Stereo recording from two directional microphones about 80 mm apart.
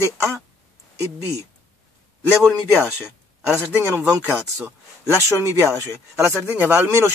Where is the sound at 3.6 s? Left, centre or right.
Right.